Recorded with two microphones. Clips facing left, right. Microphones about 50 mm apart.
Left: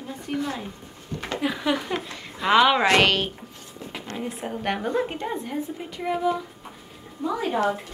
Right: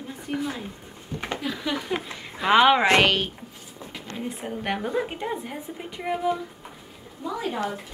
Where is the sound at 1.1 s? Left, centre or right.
Centre.